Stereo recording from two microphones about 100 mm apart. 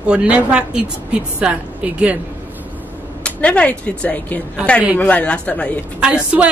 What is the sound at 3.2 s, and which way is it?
Speech, 10° left (ahead or behind).